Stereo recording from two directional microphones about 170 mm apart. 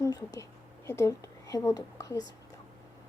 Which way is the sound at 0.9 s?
15° left (ahead or behind).